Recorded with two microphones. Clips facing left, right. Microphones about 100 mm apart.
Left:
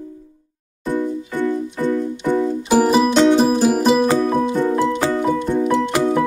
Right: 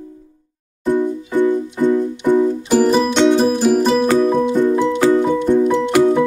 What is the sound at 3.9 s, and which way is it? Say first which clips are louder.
Music: right 1 dB; 15° left (ahead or behind).